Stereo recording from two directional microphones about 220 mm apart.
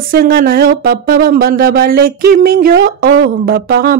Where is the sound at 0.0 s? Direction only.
40° right (ahead or behind).